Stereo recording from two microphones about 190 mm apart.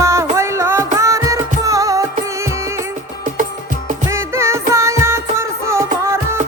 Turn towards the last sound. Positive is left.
turn(degrees=-15)  # may be behind; listen again after turning